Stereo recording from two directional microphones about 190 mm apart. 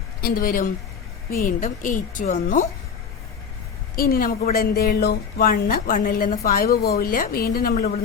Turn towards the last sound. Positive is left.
turn(degrees=50)  # may be behind; listen again after turning